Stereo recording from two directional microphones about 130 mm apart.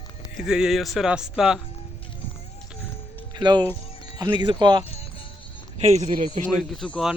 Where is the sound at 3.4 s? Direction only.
35° right (ahead or behind).